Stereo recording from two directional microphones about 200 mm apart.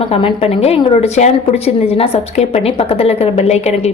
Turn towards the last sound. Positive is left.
turn(degrees=35)  # may be behind; listen again after turning